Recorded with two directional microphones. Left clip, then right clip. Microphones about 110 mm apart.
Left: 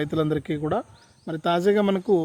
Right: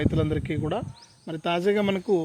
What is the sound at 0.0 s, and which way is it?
Speech, 50° left (ahead or behind).